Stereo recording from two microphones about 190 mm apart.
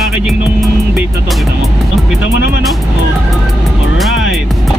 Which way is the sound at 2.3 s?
50° right (ahead or behind).